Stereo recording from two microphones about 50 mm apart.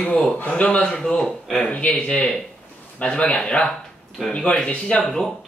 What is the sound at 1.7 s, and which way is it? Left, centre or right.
A man's voice, left.